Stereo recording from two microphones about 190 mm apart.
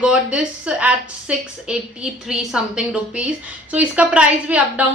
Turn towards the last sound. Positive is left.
turn(degrees=-5)  # may be behind; listen again after turning